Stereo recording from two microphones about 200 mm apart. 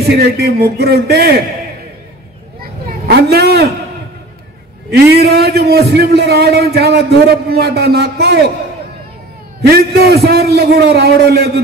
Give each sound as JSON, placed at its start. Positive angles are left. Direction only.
{"t": 0.0, "sound": "a man's voice", "side_deg": -50}
{"t": 2.6, "sound": "a sound", "side_deg": -50}
{"t": 4.9, "sound": "a man's voice", "side_deg": -55}
{"t": 9.7, "sound": "a man's voice", "side_deg": -50}